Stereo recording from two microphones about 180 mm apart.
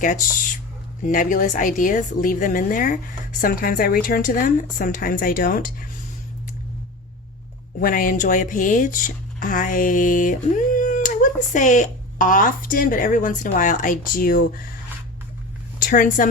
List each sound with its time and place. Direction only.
0.0 s speech: 45° left (ahead or behind)
7.8 s speech: 50° left (ahead or behind)
15.8 s speech: 50° left (ahead or behind)